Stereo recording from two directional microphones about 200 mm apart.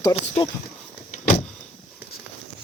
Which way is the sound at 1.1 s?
40° left (ahead or behind).